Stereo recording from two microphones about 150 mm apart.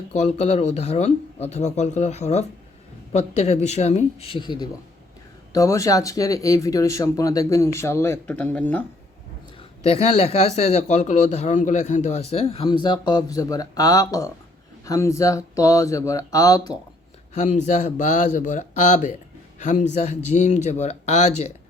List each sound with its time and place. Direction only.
0.2 s speech: 50° left (ahead or behind); by 8.8 s 10° left (ahead or behind)
9.8 s speech: 45° left (ahead or behind); by 16.7 s 25° left (ahead or behind)
17.3 s speech: 50° left (ahead or behind)